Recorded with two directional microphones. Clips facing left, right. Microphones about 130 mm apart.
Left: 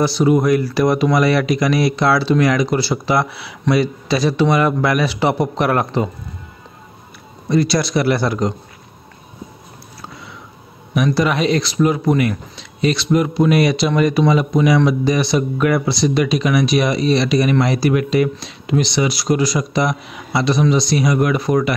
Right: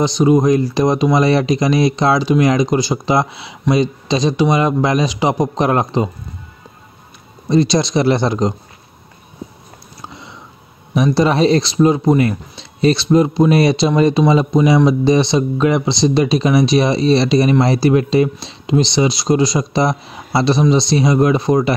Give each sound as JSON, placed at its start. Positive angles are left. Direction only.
{"t": 0.0, "sound": "speech", "side_deg": -20}
{"t": 7.4, "sound": "speech", "side_deg": -20}
{"t": 10.0, "sound": "a sound", "side_deg": -25}
{"t": 11.1, "sound": "speech", "side_deg": -30}